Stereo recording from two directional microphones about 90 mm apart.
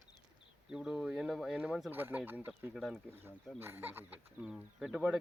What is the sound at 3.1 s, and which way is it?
Speech, 25° right (ahead or behind).